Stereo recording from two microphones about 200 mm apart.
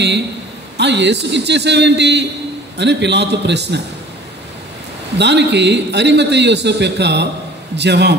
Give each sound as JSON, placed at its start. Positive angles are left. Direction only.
{"t": 0.7, "sound": "a man's voice", "side_deg": -60}
{"t": 5.1, "sound": "a man's voice", "side_deg": -60}